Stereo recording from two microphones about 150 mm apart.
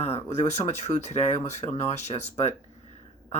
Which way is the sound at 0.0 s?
45° left (ahead or behind).